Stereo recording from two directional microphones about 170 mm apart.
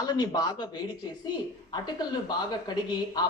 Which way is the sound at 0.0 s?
25° left (ahead or behind).